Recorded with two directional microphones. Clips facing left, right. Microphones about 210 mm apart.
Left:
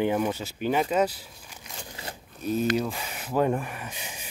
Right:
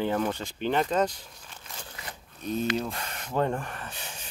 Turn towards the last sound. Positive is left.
turn(degrees=10)  # may be behind; listen again after turning